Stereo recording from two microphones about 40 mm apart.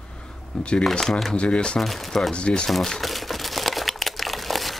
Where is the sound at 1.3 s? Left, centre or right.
Left.